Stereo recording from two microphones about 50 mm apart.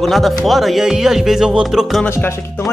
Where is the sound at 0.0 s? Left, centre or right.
Centre.